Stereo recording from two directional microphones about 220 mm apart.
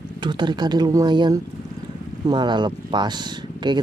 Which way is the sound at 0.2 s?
20° right (ahead or behind).